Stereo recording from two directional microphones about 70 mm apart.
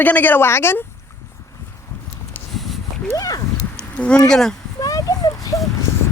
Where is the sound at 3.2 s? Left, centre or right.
Left.